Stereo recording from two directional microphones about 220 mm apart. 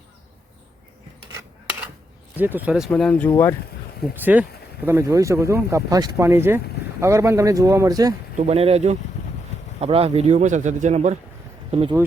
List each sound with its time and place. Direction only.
2.4 s speech: 10° right (ahead or behind); by 3.5 s 10° left (ahead or behind)
4.1 s speech: 10° right (ahead or behind)
8.4 s speech: 30° right (ahead or behind)